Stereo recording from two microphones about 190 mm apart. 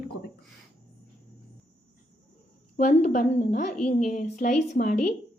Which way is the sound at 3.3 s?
35° left (ahead or behind).